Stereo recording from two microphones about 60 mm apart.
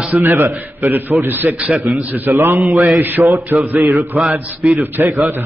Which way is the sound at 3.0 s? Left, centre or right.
Right.